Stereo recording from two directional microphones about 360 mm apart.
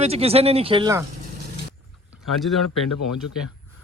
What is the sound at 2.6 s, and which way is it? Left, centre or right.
Speech, left.